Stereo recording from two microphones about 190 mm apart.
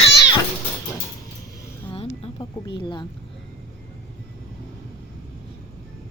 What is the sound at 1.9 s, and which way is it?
Speech, 30° left (ahead or behind).